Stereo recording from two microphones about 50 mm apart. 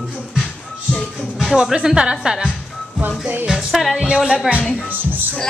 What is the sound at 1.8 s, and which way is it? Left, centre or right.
Speech, centre.